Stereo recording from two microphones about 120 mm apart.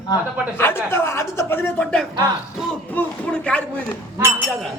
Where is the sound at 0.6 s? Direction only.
20° left (ahead or behind).